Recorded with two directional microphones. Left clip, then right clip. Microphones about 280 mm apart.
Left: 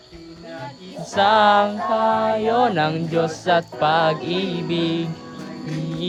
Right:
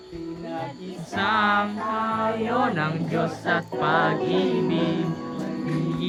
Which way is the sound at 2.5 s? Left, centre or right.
Centre.